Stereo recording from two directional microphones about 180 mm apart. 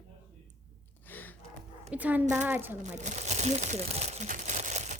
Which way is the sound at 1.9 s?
10° right (ahead or behind).